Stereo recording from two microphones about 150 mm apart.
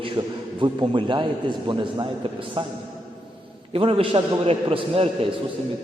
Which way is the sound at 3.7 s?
35° right (ahead or behind).